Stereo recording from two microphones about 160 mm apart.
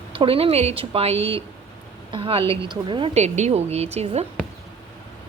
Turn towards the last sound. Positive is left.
turn(degrees=-40)  # may be behind; listen again after turning